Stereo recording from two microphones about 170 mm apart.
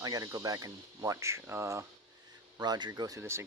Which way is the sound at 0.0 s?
20° right (ahead or behind).